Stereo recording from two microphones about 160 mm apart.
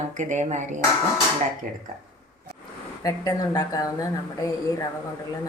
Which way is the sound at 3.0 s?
20° left (ahead or behind).